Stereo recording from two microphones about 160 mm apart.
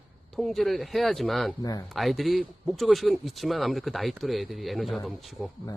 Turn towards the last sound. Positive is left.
turn(degrees=0)  # may be behind; listen again after turning